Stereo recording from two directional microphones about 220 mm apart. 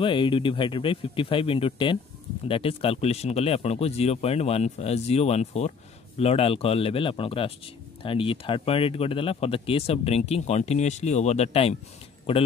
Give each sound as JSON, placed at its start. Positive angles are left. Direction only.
{"t": 0.0, "sound": "speech", "side_deg": 25}